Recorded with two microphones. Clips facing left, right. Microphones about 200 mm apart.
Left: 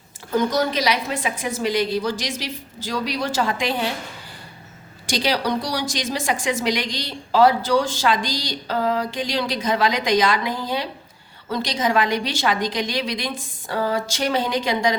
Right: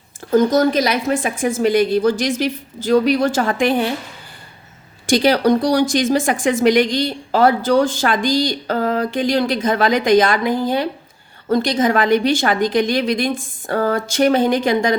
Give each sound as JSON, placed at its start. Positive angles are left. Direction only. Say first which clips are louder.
{"t": 0.3, "sound": "speech", "louder": "right 7 dB", "side_deg": -45}
{"t": 5.0, "sound": "speech", "louder": "right 8 dB", "side_deg": -55}